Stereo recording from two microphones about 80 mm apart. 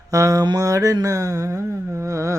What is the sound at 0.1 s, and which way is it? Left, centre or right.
Mantra, right.